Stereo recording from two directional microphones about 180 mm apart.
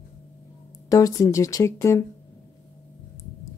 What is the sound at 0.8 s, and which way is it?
Speech, 20° left (ahead or behind).